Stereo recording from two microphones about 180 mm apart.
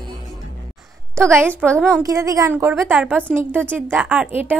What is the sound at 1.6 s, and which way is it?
Speech, 5° left (ahead or behind).